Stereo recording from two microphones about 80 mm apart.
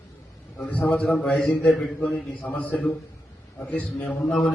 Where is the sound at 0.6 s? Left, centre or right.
Centre.